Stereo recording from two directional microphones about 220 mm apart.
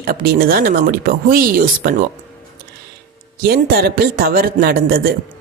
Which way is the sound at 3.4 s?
45° right (ahead or behind).